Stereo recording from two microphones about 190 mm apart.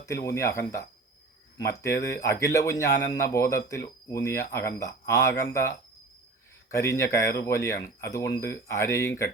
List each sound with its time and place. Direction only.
0.0 s a man's voice: 15° left (ahead or behind)